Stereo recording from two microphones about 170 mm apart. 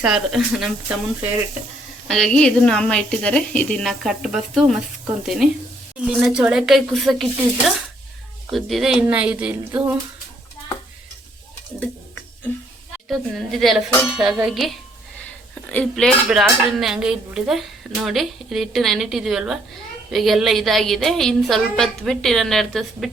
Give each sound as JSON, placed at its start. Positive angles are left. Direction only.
{"t": 0.0, "sound": "speech", "side_deg": -5}
{"t": 8.4, "sound": "speech", "side_deg": 0}
{"t": 13.1, "sound": "speech", "side_deg": 0}